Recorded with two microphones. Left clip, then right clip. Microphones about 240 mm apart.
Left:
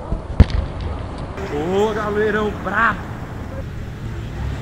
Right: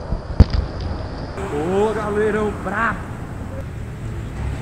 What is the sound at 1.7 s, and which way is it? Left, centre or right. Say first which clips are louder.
Speech: left 1 dB; centre.